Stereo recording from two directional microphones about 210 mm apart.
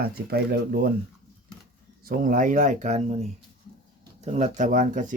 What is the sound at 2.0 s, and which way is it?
Speech, 40° right (ahead or behind).